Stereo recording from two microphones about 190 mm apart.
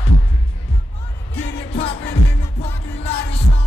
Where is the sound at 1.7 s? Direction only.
30° left (ahead or behind).